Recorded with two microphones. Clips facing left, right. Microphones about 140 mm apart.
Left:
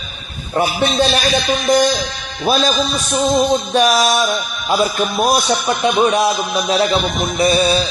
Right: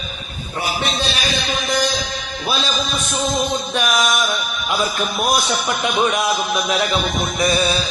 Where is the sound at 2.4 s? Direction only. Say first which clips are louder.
Left 7 dB; 40° left (ahead or behind).